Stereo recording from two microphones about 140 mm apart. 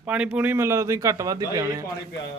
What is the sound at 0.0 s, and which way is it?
A man's voice, 10° right (ahead or behind).